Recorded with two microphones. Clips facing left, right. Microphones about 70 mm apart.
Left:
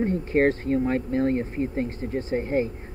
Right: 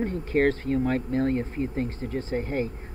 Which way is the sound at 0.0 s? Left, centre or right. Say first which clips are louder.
Left 2 dB; left.